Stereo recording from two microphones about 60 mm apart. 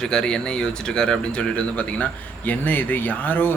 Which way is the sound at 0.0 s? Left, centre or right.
Centre.